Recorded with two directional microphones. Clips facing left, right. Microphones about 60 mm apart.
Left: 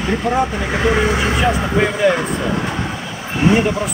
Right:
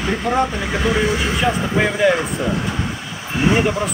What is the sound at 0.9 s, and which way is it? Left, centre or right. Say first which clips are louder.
Speech: left 3 dB; left.